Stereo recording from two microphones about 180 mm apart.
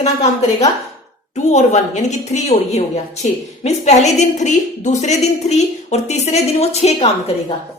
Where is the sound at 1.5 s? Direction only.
40° left (ahead or behind).